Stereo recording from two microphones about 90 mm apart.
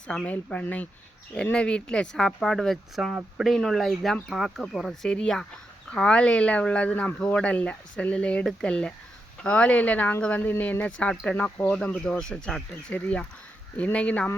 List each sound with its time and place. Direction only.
0.1 s speech: 15° left (ahead or behind)